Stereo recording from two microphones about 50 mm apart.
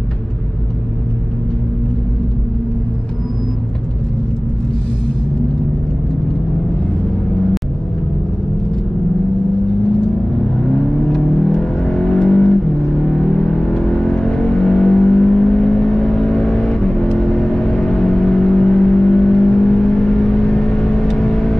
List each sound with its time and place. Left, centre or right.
11.1 s vehicle: centre